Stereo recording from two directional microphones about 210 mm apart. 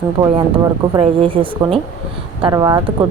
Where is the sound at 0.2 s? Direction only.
25° right (ahead or behind).